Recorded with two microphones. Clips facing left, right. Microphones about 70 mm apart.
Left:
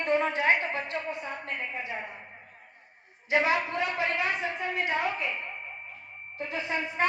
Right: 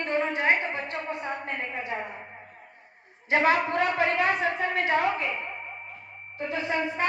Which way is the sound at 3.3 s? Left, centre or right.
Right.